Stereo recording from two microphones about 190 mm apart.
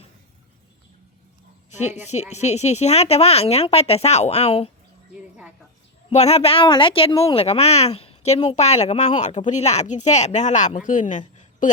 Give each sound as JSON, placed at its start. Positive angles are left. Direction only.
{"t": 2.3, "sound": "a woman's voice", "side_deg": 35}
{"t": 6.1, "sound": "a woman's voice", "side_deg": 35}